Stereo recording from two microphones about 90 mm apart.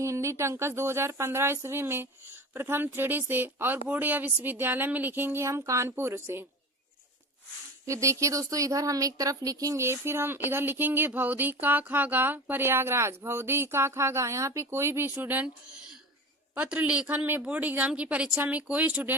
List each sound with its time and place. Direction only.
0.0 s speech: 35° right (ahead or behind)
7.9 s speech: 35° right (ahead or behind)
16.6 s speech: 15° right (ahead or behind)